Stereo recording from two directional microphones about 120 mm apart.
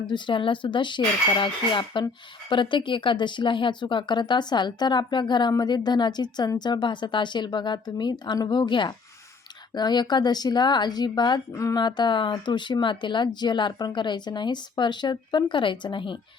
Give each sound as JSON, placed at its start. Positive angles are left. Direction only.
{"t": 0.1, "sound": "speech", "side_deg": 45}
{"t": 11.5, "sound": "speech", "side_deg": 25}
{"t": 11.8, "sound": "speech", "side_deg": 40}